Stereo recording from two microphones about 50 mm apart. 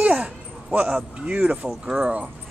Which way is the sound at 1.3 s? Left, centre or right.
Right.